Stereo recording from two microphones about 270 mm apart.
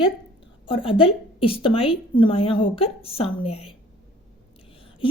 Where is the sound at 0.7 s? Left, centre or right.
Centre.